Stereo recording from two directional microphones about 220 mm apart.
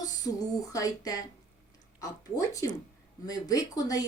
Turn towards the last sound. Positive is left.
turn(degrees=15)  # may be behind; listen again after turning